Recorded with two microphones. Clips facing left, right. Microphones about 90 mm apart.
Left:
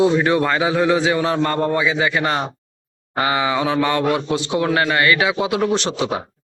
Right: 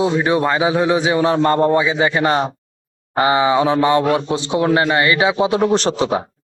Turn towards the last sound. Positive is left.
turn(degrees=-35)  # may be behind; listen again after turning